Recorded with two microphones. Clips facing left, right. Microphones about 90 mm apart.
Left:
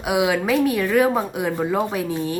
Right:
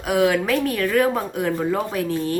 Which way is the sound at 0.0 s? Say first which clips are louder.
Right 1 dB; 15° left (ahead or behind).